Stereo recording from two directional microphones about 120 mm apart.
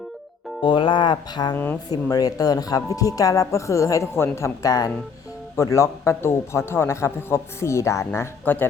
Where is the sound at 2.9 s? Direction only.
30° left (ahead or behind).